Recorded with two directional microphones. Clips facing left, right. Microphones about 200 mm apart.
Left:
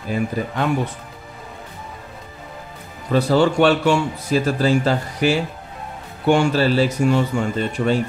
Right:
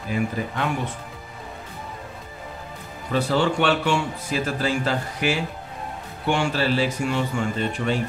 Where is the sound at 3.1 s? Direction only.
40° left (ahead or behind).